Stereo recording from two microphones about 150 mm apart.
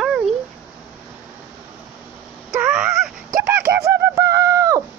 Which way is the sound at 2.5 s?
5° right (ahead or behind).